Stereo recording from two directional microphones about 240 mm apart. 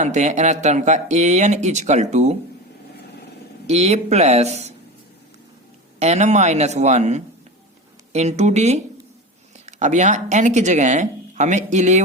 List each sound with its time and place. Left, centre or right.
0.0 s speech: right
3.7 s speech: right
6.0 s speech: right